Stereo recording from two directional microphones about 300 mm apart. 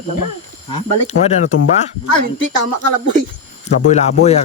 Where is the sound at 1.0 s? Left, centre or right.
Left.